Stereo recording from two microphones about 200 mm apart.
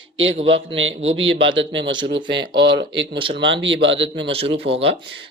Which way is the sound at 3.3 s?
65° right (ahead or behind).